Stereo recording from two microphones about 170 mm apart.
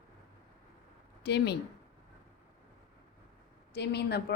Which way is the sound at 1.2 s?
80° left.